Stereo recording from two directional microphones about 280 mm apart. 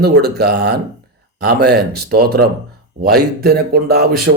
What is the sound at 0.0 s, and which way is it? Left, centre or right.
Speech, right.